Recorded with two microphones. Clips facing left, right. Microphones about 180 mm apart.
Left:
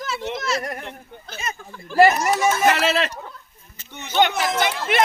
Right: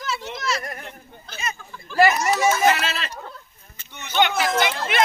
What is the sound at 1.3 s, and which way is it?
Speech, 45° left (ahead or behind).